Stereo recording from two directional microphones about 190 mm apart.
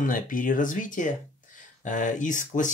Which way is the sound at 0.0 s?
45° left (ahead or behind).